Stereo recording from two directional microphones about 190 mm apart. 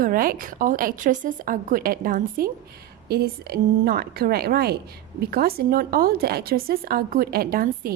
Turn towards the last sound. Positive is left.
turn(degrees=-50)  # may be behind; listen again after turning